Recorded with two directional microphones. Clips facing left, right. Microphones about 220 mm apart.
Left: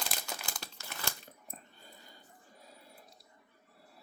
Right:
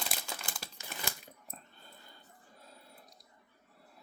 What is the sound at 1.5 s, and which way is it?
Dog, 10° left (ahead or behind).